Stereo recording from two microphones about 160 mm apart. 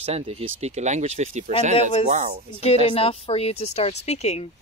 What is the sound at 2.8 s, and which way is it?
A woman's voice, 35° left (ahead or behind).